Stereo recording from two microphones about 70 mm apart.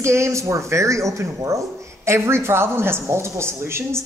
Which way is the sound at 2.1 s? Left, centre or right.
Right.